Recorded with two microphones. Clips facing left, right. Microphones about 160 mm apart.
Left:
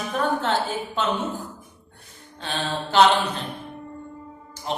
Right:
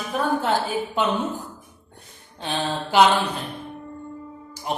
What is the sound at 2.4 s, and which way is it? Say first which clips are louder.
Speech: right 2 dB; 15° right (ahead or behind).